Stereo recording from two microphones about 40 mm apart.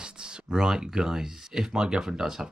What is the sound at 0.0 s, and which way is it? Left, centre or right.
Speech, right.